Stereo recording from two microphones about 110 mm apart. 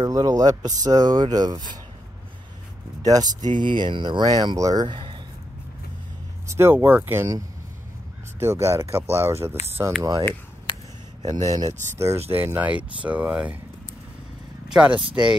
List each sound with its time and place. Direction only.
0.0 s speech: 35° right (ahead or behind)
3.0 s speech: 35° right (ahead or behind)
4.8 s speech: 50° right (ahead or behind)
6.4 s speech: 25° right (ahead or behind)
8.4 s speech: 25° right (ahead or behind)
11.2 s speech: 35° right (ahead or behind)
12.3 s speech: 20° right (ahead or behind)
14.7 s speech: 10° right (ahead or behind)
15.0 s speech: 50° right (ahead or behind)